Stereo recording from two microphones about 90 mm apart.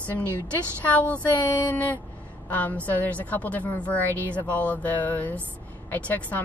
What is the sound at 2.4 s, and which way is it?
A woman's voice, 20° left (ahead or behind).